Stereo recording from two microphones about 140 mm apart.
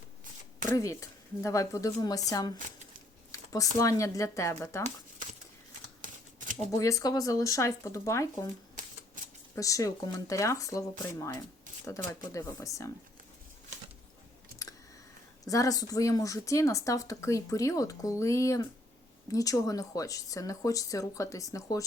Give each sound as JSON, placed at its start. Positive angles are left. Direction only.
{"t": 0.8, "sound": "speech", "side_deg": 20}
{"t": 6.0, "sound": "typewriter", "side_deg": -70}
{"t": 6.7, "sound": "speech", "side_deg": 25}
{"t": 8.8, "sound": "typewriter", "side_deg": -75}
{"t": 9.6, "sound": "speech", "side_deg": 25}
{"t": 15.4, "sound": "speech", "side_deg": 25}